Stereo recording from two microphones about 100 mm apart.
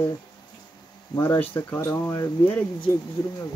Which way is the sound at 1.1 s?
20° left (ahead or behind).